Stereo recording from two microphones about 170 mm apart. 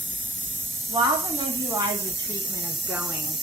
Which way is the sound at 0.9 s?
25° right (ahead or behind).